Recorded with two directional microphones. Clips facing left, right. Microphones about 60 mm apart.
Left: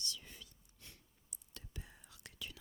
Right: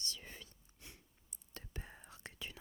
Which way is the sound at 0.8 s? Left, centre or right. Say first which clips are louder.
Right 2 dB; right.